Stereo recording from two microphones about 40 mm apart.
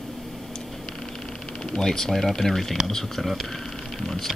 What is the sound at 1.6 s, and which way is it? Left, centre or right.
Speech, centre.